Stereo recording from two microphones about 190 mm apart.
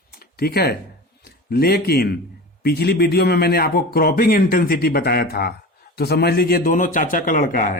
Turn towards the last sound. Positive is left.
turn(degrees=45)  # may be behind; listen again after turning